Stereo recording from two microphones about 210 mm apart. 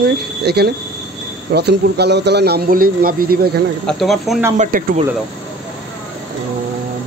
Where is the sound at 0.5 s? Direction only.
50° right (ahead or behind).